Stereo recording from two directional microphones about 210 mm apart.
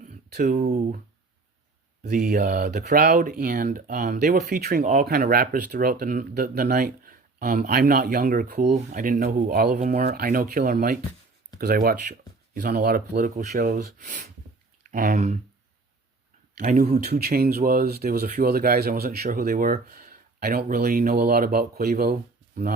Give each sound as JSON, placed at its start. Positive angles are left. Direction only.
{"t": 0.0, "sound": "speech", "side_deg": -35}
{"t": 2.0, "sound": "speech", "side_deg": -35}
{"t": 5.0, "sound": "speech", "side_deg": -45}
{"t": 16.6, "sound": "speech", "side_deg": -35}
{"t": 16.9, "sound": "speech", "side_deg": -50}